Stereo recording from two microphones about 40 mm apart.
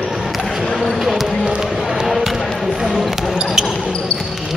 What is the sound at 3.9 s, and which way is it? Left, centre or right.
Basketball bounce, left.